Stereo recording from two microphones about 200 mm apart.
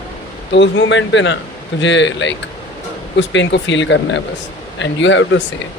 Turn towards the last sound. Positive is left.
turn(degrees=70)  # may be behind; listen again after turning